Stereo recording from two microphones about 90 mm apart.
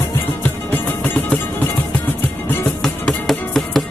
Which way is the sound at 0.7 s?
20° left (ahead or behind).